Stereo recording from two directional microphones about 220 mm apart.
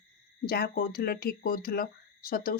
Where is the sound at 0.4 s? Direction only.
45° left (ahead or behind).